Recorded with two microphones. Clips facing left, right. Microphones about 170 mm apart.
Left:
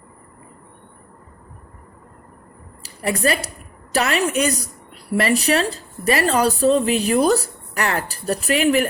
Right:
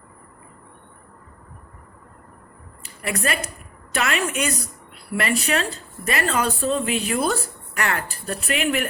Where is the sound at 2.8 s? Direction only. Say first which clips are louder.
Left 5 dB; 35° left (ahead or behind).